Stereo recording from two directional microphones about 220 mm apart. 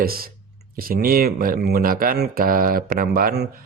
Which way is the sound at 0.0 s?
40° right (ahead or behind).